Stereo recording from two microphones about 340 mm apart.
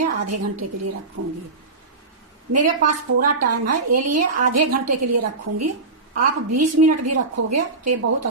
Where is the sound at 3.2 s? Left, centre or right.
Right.